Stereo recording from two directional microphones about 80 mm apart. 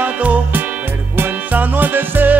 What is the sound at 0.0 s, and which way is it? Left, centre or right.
Music, centre.